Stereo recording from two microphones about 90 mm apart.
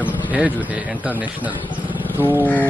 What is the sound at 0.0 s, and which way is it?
A man's voice, 15° right (ahead or behind).